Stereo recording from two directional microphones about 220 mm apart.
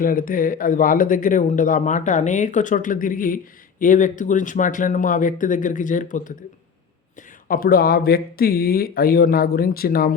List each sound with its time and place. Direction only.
0.0 s speech: 40° left (ahead or behind)
7.4 s speech: 40° left (ahead or behind)